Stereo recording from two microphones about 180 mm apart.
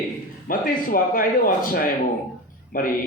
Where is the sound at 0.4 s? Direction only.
50° left (ahead or behind).